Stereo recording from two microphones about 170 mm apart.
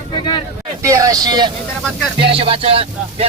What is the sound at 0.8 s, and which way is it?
Speech, 20° right (ahead or behind).